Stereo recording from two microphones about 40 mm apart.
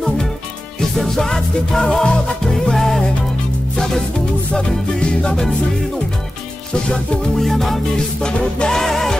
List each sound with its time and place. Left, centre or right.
0.9 s music: centre
7.3 s music: centre
8.2 s music: left
8.6 s music: centre